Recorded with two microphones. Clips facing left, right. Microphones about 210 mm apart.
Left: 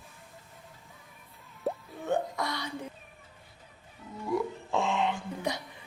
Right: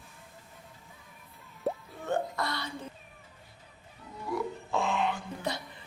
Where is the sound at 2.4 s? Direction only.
15° left (ahead or behind).